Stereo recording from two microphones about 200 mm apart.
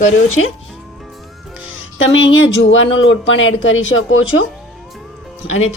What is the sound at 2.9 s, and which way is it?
Speech, 70° left (ahead or behind).